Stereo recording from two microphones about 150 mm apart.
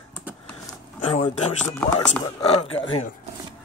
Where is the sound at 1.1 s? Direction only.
40° left (ahead or behind).